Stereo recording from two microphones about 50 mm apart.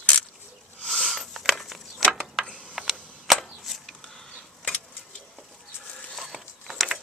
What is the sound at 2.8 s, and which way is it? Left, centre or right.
Cap gun, centre.